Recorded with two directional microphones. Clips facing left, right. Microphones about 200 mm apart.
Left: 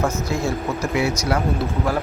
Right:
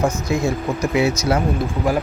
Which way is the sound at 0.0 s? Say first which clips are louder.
Right 3 dB; 15° right (ahead or behind).